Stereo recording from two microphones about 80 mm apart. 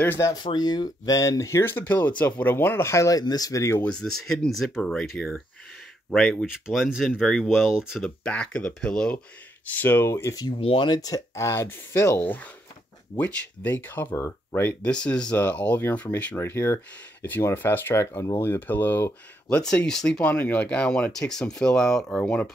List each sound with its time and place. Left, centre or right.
0.4 s speech: left
0.7 s speech: left
1.6 s speech: left
3.8 s speech: centre
6.4 s speech: centre
8.0 s speech: centre
9.7 s speech: left
10.3 s speech: left
14.8 s speech: centre
16.3 s speech: left
19.5 s speech: centre
20.2 s speech: left